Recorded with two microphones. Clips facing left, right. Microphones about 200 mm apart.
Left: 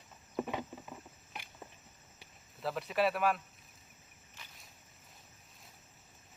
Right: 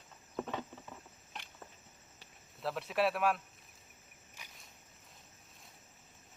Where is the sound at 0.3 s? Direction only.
10° left (ahead or behind).